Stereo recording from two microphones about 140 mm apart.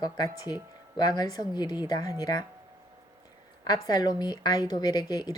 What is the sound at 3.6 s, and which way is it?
Speech, 30° left (ahead or behind).